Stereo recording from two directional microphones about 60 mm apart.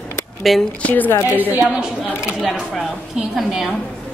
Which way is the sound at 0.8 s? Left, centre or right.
Left.